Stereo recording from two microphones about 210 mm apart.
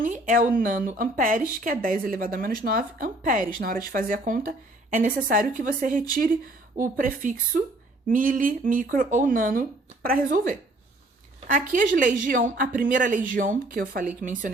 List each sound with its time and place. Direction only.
0.0 s a woman's voice: 40° right (ahead or behind)